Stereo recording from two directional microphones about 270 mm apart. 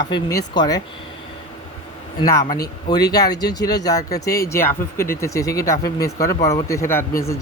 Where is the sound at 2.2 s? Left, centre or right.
Centre.